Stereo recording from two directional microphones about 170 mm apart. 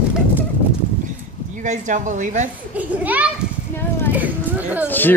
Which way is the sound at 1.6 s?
50° right (ahead or behind).